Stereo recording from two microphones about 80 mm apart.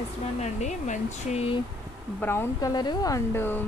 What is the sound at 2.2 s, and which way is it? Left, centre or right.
Speech, left.